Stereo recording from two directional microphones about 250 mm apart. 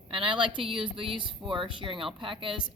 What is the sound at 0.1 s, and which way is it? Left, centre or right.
Speech, centre.